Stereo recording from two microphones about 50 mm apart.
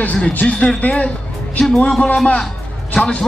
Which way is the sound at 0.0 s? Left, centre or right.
Left.